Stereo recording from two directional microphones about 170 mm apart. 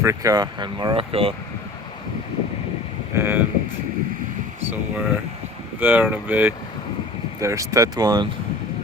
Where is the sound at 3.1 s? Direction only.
15° right (ahead or behind).